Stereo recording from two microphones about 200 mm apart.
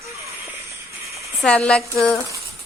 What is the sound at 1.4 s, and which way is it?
Speech, 5° left (ahead or behind).